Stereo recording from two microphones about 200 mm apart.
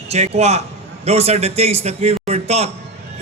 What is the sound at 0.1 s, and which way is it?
A man's voice, 30° right (ahead or behind).